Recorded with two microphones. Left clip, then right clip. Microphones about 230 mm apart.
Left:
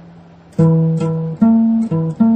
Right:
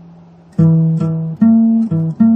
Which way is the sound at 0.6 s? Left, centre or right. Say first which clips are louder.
Left 1 dB; right.